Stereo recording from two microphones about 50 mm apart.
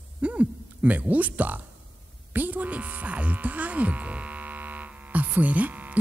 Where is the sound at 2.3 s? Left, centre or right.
Right.